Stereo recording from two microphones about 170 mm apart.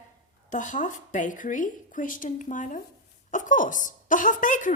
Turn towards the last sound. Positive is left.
turn(degrees=50)  # may be behind; listen again after turning